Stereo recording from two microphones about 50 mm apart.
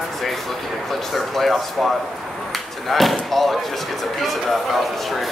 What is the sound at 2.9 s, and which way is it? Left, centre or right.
Speech, centre.